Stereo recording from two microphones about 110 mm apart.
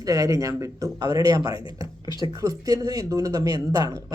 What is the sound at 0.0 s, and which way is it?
Speech, 30° right (ahead or behind).